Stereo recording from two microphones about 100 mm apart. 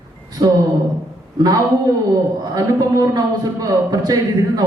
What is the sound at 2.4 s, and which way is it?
Speech, 45° right (ahead or behind).